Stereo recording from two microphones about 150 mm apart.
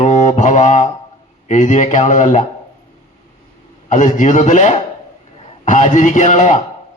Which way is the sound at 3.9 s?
55° left (ahead or behind).